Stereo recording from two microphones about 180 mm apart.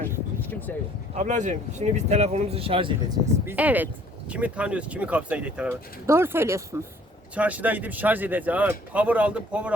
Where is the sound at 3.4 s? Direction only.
10° right (ahead or behind).